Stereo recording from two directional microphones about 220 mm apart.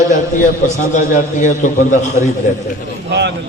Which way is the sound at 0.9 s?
35° left (ahead or behind).